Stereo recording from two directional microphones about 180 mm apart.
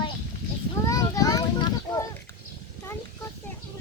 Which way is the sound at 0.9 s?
20° left (ahead or behind).